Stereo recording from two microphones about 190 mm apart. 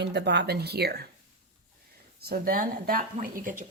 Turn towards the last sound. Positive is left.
turn(degrees=-45)  # may be behind; listen again after turning